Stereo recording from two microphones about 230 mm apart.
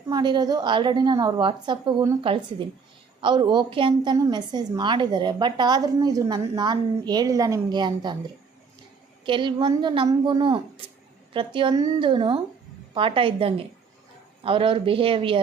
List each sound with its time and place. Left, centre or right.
0.1 s a woman's voice: centre
9.2 s a woman's voice: right